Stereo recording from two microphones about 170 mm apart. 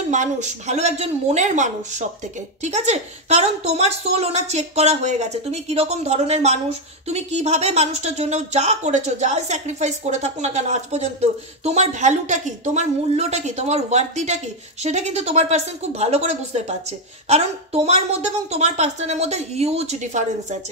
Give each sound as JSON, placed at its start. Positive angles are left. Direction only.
{"t": 0.1, "sound": "a woman's voice", "side_deg": -45}